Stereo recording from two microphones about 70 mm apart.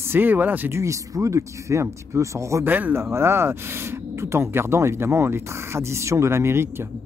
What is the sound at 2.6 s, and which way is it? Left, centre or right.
Speech, right.